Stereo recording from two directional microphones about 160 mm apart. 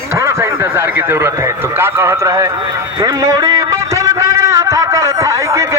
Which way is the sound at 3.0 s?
25° right (ahead or behind).